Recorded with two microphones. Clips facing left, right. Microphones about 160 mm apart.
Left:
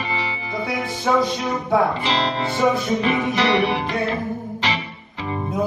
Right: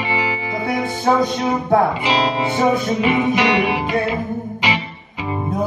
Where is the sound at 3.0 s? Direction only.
15° right (ahead or behind).